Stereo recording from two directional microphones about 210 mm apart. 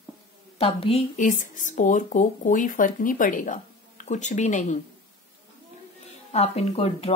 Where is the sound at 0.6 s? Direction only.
30° left (ahead or behind).